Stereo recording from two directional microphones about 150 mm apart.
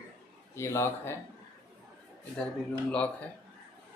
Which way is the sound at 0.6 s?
20° left (ahead or behind).